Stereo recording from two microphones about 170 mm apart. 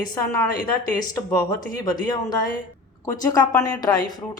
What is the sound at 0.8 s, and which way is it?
A woman's voice, 20° left (ahead or behind).